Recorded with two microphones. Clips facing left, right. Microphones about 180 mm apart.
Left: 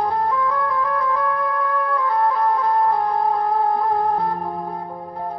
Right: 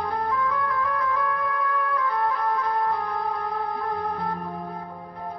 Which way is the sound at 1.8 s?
30° left (ahead or behind).